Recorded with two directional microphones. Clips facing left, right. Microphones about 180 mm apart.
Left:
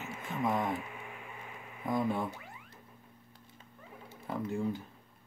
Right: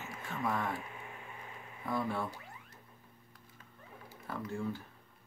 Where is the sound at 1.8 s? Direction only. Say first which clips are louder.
Left 4 dB; 15° left (ahead or behind).